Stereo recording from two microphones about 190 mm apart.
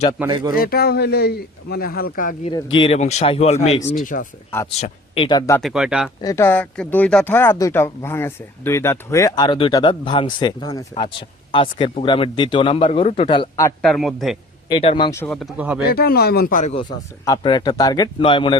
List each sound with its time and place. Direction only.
0.3 s speech: 25° right (ahead or behind)
0.5 s speech: 50° left (ahead or behind)
2.7 s speech: 30° left (ahead or behind)
4.0 s speech: 45° left (ahead or behind)
4.8 s speech: 30° left (ahead or behind)
5.5 s a man's voice: centre (ahead or behind)
6.2 s speech: 15° left (ahead or behind)
13.8 s a man's voice: centre (ahead or behind)
14.7 s speech: 25° left (ahead or behind)
15.3 s a man's voice: centre (ahead or behind)
15.9 s speech: 55° left (ahead or behind)
17.2 s speech: 25° left (ahead or behind)